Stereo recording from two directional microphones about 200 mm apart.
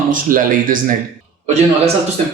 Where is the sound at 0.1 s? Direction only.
45° right (ahead or behind).